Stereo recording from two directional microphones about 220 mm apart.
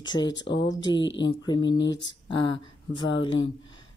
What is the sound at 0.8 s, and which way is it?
Speech, 20° left (ahead or behind).